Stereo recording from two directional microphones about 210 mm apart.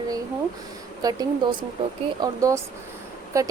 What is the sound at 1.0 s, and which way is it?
Speech, 20° right (ahead or behind).